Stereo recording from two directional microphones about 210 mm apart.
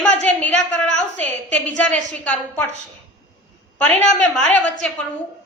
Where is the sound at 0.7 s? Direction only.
5° left (ahead or behind).